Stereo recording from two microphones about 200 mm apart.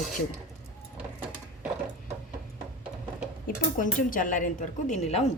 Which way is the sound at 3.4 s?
40° left (ahead or behind).